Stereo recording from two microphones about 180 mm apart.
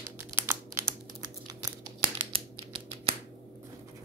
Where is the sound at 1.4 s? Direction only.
20° right (ahead or behind).